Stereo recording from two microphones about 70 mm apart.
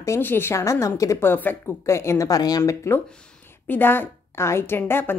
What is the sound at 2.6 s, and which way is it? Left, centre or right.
Speech, left.